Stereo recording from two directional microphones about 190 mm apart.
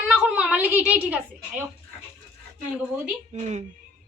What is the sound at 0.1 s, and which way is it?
A woman's voice, 5° right (ahead or behind).